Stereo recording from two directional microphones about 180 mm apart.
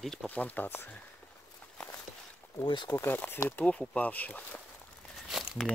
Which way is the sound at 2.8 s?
10° left (ahead or behind).